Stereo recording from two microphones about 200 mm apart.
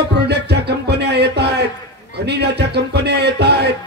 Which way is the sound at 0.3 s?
55° right (ahead or behind).